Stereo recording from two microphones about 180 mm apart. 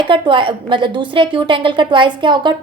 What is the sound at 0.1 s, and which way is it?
A woman's voice, 30° right (ahead or behind).